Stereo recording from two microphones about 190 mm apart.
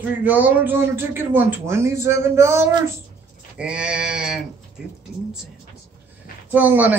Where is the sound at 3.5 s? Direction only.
5° right (ahead or behind).